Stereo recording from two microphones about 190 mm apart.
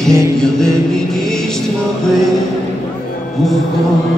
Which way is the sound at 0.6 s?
5° left (ahead or behind).